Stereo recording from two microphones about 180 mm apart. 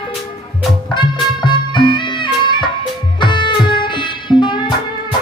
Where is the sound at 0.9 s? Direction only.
25° left (ahead or behind).